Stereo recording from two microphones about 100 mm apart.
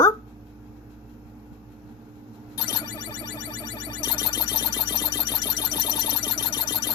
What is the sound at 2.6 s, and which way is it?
Music, 40° left (ahead or behind).